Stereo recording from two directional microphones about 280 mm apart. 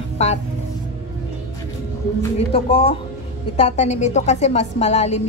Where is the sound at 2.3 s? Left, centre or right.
Left.